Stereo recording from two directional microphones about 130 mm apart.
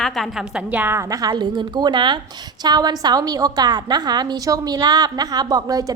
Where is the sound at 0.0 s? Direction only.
Centre (ahead or behind).